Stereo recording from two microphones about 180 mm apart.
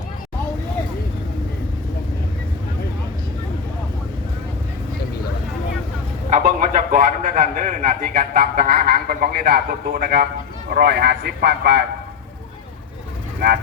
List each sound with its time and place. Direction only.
6.3 s a man's voice: 45° right (ahead or behind); by 11.8 s 65° right (ahead or behind)